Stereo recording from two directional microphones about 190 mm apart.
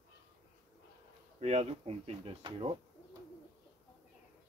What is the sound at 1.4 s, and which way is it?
Speech, 35° right (ahead or behind).